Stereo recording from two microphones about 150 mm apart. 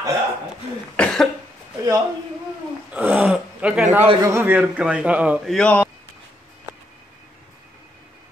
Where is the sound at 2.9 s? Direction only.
10° right (ahead or behind).